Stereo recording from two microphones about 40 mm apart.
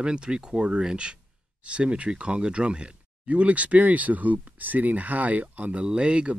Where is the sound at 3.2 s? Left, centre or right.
Right.